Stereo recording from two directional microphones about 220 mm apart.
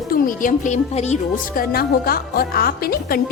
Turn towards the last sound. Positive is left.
turn(degrees=45)  # may be behind; listen again after turning